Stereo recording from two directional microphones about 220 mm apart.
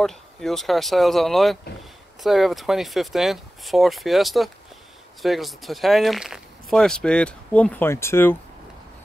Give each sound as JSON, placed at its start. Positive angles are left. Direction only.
{"t": 0.0, "sound": "speech", "side_deg": 0}